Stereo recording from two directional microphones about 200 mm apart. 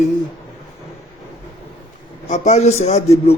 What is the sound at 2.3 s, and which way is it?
A man's voice, 35° left (ahead or behind).